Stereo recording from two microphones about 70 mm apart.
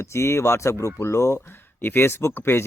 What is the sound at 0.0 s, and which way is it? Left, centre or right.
Speech, left.